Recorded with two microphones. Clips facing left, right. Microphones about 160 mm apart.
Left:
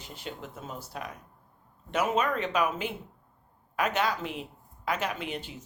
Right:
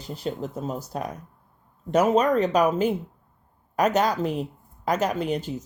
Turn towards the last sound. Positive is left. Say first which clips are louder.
# right 10 dB
turn(degrees=-40)  # may be behind; listen again after turning